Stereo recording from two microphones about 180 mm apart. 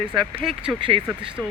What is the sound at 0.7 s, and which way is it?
Speech, centre (ahead or behind).